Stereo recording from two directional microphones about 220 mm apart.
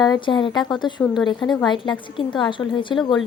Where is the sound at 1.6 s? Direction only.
20° left (ahead or behind).